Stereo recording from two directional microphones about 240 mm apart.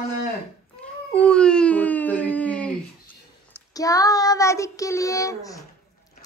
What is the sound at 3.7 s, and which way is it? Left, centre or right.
Child singing, centre.